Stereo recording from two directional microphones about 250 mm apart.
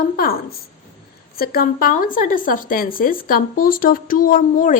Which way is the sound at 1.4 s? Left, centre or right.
Left.